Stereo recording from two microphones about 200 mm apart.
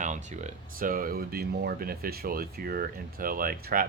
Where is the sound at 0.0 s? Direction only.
35° right (ahead or behind).